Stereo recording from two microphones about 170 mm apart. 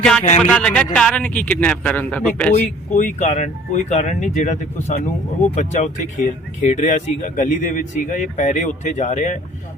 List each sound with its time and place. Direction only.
0.5 s speech: 5° left (ahead or behind)
2.9 s speech: 45° left (ahead or behind)